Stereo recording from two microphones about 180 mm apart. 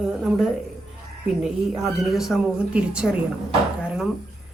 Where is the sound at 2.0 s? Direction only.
Centre (ahead or behind).